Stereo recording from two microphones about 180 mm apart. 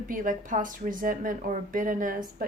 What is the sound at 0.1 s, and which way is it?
Speech, 50° right (ahead or behind).